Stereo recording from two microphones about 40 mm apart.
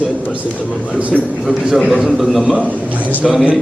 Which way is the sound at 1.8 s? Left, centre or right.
Centre.